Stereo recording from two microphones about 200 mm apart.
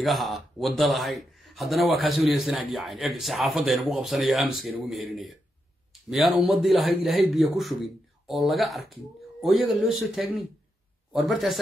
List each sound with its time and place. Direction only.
0.0 s a man's voice: centre (ahead or behind)